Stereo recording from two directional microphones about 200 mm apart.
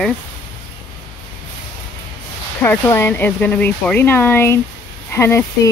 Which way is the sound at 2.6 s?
10° left (ahead or behind).